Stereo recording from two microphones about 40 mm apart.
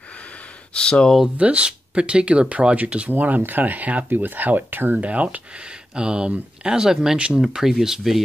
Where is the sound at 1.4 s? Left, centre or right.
Right.